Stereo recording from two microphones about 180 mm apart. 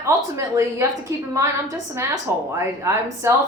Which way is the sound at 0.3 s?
15° right (ahead or behind).